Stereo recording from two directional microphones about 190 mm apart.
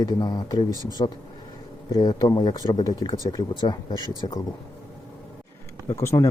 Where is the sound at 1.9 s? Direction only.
20° left (ahead or behind).